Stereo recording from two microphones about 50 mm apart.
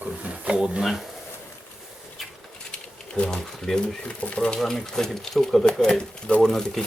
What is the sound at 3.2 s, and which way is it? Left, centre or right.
Speech, centre.